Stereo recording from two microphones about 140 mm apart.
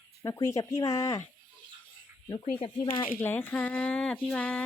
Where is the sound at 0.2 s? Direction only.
20° left (ahead or behind).